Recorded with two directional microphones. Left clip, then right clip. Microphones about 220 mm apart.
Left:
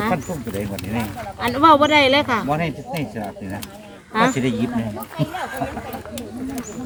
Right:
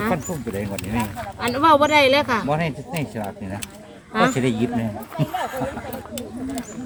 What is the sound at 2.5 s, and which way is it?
Speech, 40° right (ahead or behind).